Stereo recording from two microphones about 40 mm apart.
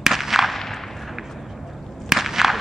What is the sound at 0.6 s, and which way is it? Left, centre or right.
Whip, centre.